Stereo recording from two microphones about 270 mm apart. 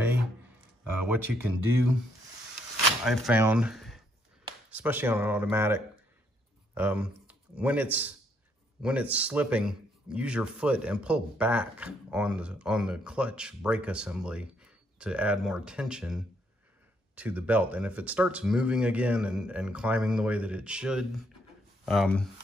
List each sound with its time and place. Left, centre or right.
0.8 s speech: centre
3.0 s speech: centre